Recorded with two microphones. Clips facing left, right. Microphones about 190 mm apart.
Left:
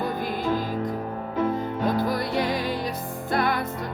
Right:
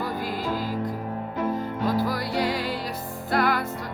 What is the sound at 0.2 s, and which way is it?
Music, 55° left (ahead or behind).